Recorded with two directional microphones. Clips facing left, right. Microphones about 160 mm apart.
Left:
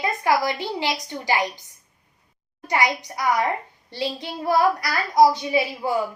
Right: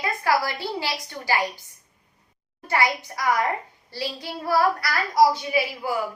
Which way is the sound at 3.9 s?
20° left (ahead or behind).